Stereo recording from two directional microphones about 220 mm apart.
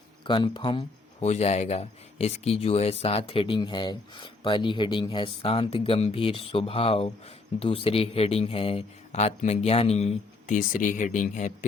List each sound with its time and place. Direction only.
0.3 s speech: 20° left (ahead or behind)